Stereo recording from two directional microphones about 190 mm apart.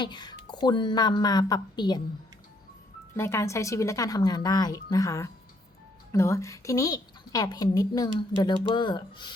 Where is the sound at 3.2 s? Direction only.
15° left (ahead or behind).